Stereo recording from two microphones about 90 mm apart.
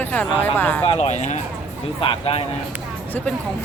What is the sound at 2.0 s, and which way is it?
Speech, 85° left.